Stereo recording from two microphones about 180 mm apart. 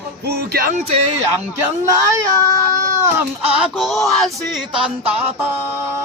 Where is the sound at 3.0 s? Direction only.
15° right (ahead or behind).